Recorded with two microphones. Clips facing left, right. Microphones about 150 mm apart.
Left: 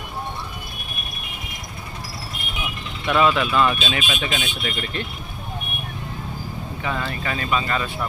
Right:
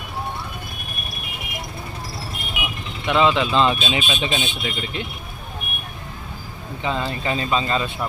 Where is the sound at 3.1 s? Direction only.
20° right (ahead or behind).